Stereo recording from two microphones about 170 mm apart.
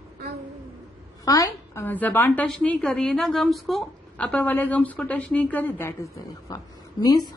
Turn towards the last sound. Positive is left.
turn(degrees=25)  # may be behind; listen again after turning